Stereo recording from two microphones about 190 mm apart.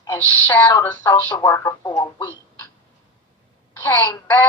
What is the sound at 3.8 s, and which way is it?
Speech, 10° left (ahead or behind).